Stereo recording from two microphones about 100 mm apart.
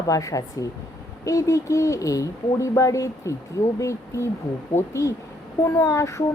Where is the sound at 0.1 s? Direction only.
35° left (ahead or behind).